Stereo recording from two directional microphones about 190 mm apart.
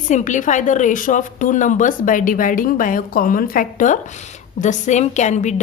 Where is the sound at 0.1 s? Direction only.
40° left (ahead or behind).